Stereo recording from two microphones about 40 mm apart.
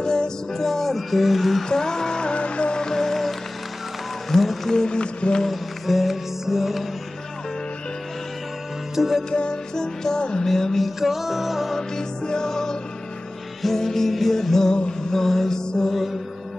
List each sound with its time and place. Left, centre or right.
0.0 s music: centre
0.5 s speech: centre
1.7 s music: centre
2.8 s music: centre
4.7 s speech: left
5.4 s music: centre
8.9 s music: centre
9.3 s music: left
10.4 s music: centre
11.0 s speech: centre
11.9 s music: centre
14.8 s mantra: centre